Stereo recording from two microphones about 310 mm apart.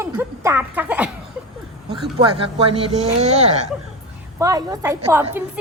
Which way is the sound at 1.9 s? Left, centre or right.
Centre.